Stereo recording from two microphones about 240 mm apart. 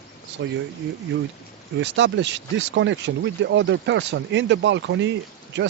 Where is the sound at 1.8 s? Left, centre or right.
Right.